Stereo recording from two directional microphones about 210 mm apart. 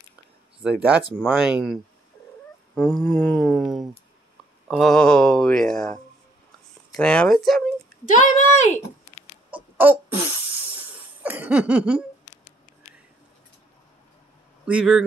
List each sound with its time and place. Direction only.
0.6 s speech: 5° right (ahead or behind)
3.1 s speech: centre (ahead or behind)
7.0 s speech: 5° left (ahead or behind)
8.0 s speech: 35° left (ahead or behind)
9.5 s a sound: 10° right (ahead or behind)
11.2 s a sound: 10° right (ahead or behind)
14.7 s speech: 5° right (ahead or behind)